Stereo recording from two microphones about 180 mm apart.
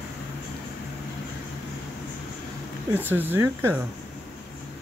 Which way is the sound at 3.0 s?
10° right (ahead or behind).